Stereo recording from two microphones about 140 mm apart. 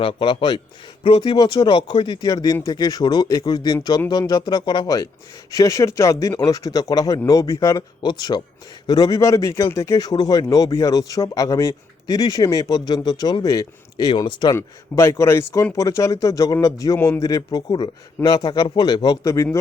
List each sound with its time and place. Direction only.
0.0 s a man's voice: 40° left (ahead or behind)
14.5 s a man's voice: 20° left (ahead or behind)